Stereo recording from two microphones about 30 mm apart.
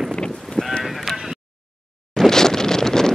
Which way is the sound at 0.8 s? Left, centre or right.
Centre.